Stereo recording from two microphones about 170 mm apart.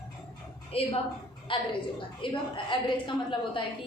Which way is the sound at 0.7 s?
35° left (ahead or behind).